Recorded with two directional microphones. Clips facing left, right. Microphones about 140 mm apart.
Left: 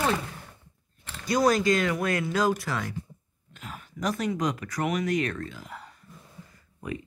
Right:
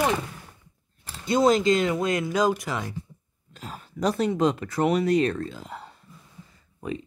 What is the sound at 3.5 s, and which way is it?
Speech, 30° right (ahead or behind).